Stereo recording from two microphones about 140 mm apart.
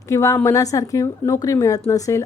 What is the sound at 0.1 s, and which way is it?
A woman's voice, 20° left (ahead or behind).